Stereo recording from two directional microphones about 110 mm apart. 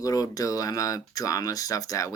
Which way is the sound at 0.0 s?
30° left (ahead or behind).